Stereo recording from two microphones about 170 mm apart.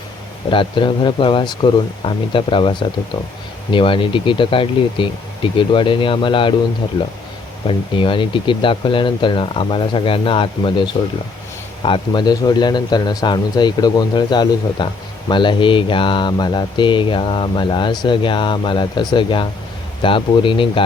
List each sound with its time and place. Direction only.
0.5 s speech: 30° left (ahead or behind)
7.7 s speech: 30° left (ahead or behind)
11.9 s speech: 25° left (ahead or behind)